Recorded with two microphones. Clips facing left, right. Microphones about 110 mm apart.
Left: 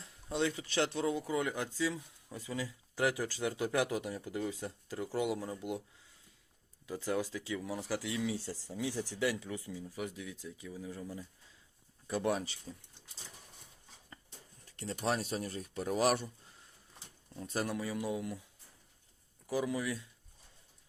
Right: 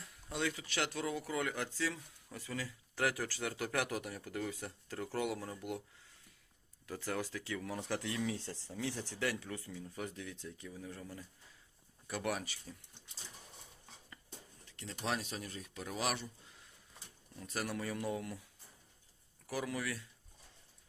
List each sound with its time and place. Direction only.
0.0 s a sound: 25° left (ahead or behind)
0.7 s speech: 30° left (ahead or behind)
6.8 s speech: 15° left (ahead or behind)
7.8 s speech: 5° left (ahead or behind)
12.0 s speech: 25° left (ahead or behind)
14.8 s speech: 40° left (ahead or behind)
17.3 s speech: 30° left (ahead or behind)
17.7 s speech: 15° left (ahead or behind)
19.5 s speech: 20° left (ahead or behind)